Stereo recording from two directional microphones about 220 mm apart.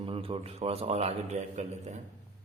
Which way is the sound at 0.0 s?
25° right (ahead or behind).